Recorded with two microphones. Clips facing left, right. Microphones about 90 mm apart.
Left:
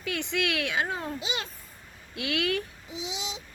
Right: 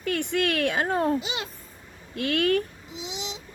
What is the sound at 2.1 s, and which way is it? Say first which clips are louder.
Speech: right 6 dB; 45° right (ahead or behind).